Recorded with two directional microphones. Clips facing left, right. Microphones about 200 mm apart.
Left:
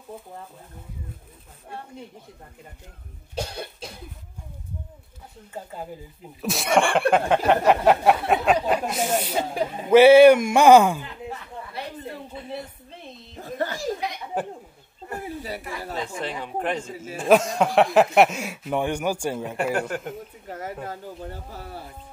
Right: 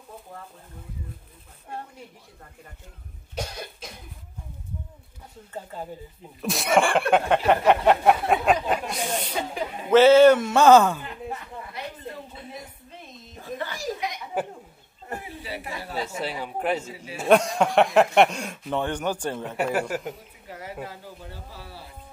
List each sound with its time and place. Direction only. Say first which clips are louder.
3.3 s cough: left 2 dB; 30° left (ahead or behind)
6.4 s speech: even; centre (ahead or behind)
9.3 s speech: left 4 dB; 35° left (ahead or behind)
9.8 s speech: left 3 dB; 10° left (ahead or behind)
13.4 s a sound: left 4 dB; 45° left (ahead or behind)
13.7 s a sound: left 2 dB; 30° left (ahead or behind)
15.2 s speech: left 3 dB; 45° left (ahead or behind)
16.0 s speech: right 2 dB; 5° right (ahead or behind)
16.9 s speech: left 4 dB; 45° left (ahead or behind)
17.2 s speech: left 1 dB; centre (ahead or behind)
19.7 s speech: even; 5° right (ahead or behind)
20.4 s a sound: left 4 dB; 45° left (ahead or behind)
20.8 s speech: left 4 dB; 50° left (ahead or behind)